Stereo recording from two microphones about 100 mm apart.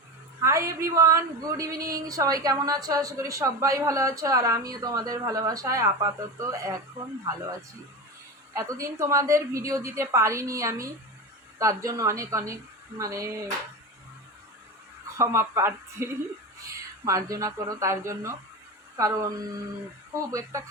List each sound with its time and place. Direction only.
0.4 s a woman's voice: 30° right (ahead or behind)
8.5 s a woman's voice: 30° right (ahead or behind)
15.2 s speech: 30° right (ahead or behind)
17.1 s a woman's voice: 35° right (ahead or behind)